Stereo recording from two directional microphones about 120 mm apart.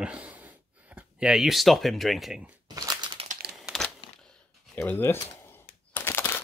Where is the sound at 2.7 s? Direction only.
35° right (ahead or behind).